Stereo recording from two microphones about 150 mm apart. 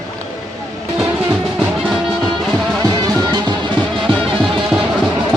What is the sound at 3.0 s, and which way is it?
Music, 30° right (ahead or behind).